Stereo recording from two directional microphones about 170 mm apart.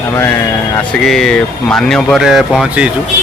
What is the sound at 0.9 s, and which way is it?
Speech, centre (ahead or behind).